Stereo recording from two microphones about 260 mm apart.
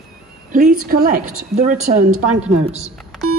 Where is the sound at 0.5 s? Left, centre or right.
Right.